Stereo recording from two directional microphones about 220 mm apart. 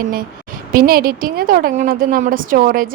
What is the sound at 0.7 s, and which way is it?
A woman's voice, 40° right (ahead or behind).